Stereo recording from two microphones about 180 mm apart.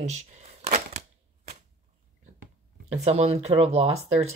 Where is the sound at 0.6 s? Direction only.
40° right (ahead or behind).